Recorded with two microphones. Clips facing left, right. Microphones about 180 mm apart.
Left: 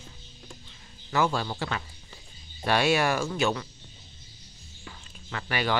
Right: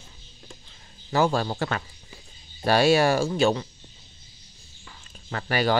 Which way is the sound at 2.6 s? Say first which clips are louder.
Right 5 dB; 35° right (ahead or behind).